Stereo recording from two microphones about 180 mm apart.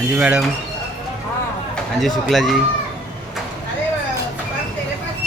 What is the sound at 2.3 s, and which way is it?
Speech, centre (ahead or behind).